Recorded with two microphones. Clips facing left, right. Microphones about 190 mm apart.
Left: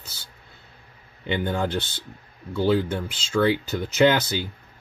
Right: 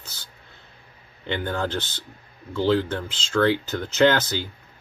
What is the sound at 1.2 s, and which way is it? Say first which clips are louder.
Speech: left 2 dB; 15° left (ahead or behind).